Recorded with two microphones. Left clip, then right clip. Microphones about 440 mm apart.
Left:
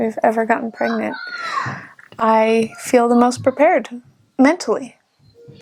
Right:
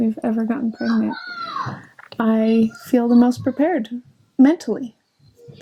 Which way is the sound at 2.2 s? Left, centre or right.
Left.